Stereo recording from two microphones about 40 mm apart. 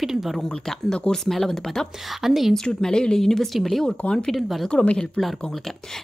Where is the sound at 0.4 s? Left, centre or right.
Centre.